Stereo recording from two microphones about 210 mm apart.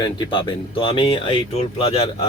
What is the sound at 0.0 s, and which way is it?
Speech, 20° left (ahead or behind).